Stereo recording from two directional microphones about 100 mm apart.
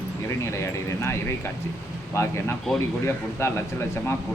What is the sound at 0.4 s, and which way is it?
Speech, 30° left (ahead or behind).